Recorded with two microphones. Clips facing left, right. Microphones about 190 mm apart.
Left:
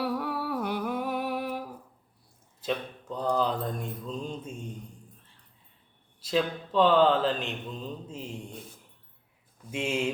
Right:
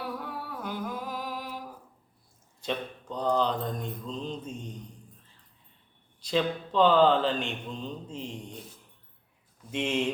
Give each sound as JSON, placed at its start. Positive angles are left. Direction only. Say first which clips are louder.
{"t": 0.0, "sound": "humming", "louder": "left 6 dB", "side_deg": 70}
{"t": 2.6, "sound": "mantra", "louder": "left 1 dB", "side_deg": 5}
{"t": 6.1, "sound": "a man's voice", "louder": "even", "side_deg": 0}
{"t": 9.7, "sound": "mantra", "louder": "right 1 dB", "side_deg": 5}